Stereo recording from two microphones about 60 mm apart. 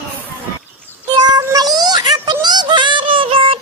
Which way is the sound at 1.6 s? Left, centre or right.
Right.